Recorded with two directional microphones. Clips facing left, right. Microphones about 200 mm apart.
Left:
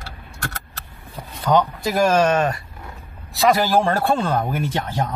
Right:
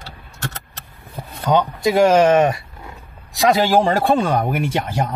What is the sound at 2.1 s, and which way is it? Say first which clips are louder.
Speech: right 3 dB; 15° right (ahead or behind).